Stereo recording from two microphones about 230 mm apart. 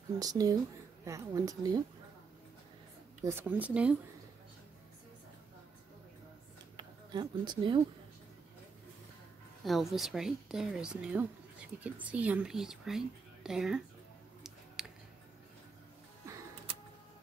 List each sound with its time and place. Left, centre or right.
0.2 s a woman's voice: centre
3.3 s a woman's voice: centre
6.8 s speech: centre
9.7 s speech: centre
14.8 s music: centre
16.3 s music: centre